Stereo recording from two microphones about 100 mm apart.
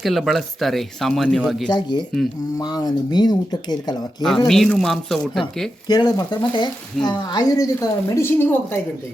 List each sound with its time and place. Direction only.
0.0 s speech: centre (ahead or behind)
1.7 s speech: 50° left (ahead or behind)
4.4 s speech: 5° left (ahead or behind)
5.9 s speech: 45° left (ahead or behind); by 8.8 s 25° left (ahead or behind)